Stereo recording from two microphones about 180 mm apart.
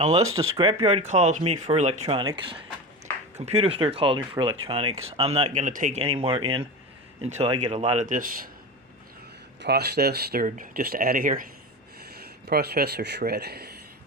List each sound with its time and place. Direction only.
0.0 s speech: 35° right (ahead or behind)
6.0 s speech: 35° right (ahead or behind); by 8.4 s 50° right (ahead or behind)
9.6 s speech: 65° right (ahead or behind)
10.4 s speech: 50° right (ahead or behind)
12.5 s speech: 60° right (ahead or behind)